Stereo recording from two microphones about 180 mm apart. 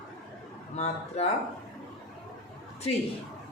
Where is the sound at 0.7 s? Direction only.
40° left (ahead or behind).